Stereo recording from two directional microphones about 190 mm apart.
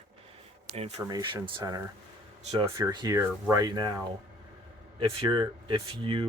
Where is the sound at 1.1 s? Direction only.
20° right (ahead or behind).